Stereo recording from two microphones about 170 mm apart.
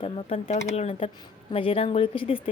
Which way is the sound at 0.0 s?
35° left (ahead or behind).